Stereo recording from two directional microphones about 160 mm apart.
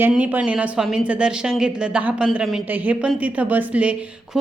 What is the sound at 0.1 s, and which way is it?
A woman's voice, 10° right (ahead or behind).